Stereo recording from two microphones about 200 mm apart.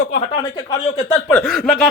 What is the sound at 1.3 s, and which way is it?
Speech, 5° left (ahead or behind).